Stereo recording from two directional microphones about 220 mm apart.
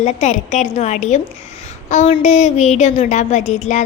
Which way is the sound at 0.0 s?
30° left (ahead or behind).